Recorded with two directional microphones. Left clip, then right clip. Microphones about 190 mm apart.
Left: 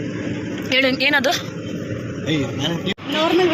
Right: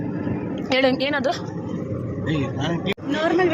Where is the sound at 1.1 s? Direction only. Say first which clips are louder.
Left 5 dB; 5° right (ahead or behind).